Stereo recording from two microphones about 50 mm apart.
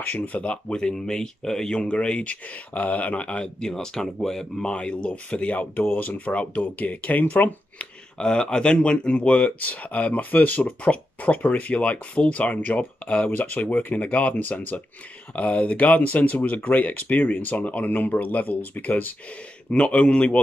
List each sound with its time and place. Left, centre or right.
0.0 s speech: left
8.2 s speech: centre; by 19.1 s left
19.7 s speech: left